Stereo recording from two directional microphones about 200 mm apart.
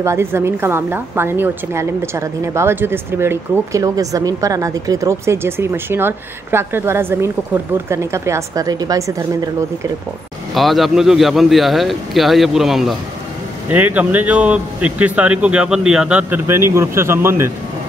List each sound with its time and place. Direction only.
0.0 s a woman's voice: 15° right (ahead or behind)
10.5 s a woman's voice: centre (ahead or behind)